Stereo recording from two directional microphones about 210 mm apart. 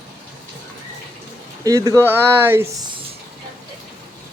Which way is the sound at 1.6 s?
15° right (ahead or behind).